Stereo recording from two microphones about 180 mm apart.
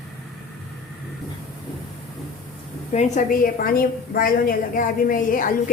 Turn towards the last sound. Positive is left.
turn(degrees=50)  # may be behind; listen again after turning